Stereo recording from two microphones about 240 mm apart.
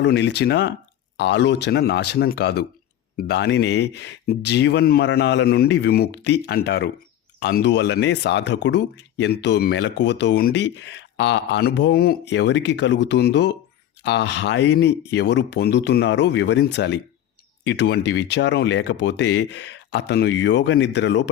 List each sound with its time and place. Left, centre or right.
0.0 s speech: left